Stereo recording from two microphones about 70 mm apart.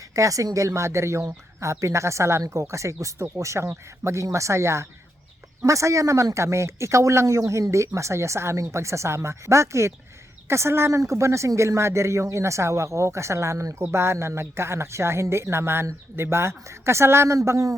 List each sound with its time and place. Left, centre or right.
0.1 s speech: right